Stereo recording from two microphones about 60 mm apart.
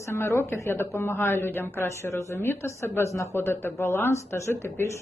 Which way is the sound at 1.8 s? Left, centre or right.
Left.